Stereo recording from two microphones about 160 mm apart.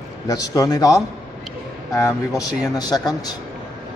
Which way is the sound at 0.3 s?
25° left (ahead or behind).